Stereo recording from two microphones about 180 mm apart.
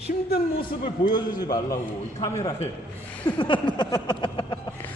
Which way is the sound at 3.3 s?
25° left (ahead or behind).